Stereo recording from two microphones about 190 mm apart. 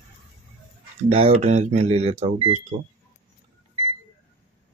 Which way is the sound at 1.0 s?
35° right (ahead or behind).